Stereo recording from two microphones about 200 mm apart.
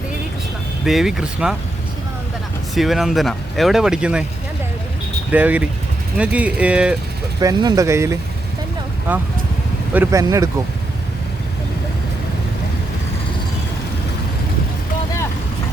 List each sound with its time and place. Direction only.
0.9 s speech: centre (ahead or behind)
2.7 s speech: centre (ahead or behind)
5.3 s speech: 10° right (ahead or behind)
7.3 s speech: 20° right (ahead or behind)
9.9 s speech: 15° right (ahead or behind)